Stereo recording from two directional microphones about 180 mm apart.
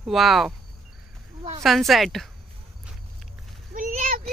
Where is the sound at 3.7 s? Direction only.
45° right (ahead or behind).